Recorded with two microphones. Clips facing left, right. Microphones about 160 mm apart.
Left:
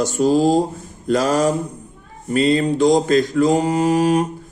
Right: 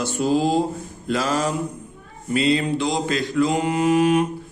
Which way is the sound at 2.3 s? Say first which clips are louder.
Left 3 dB; 45° left (ahead or behind).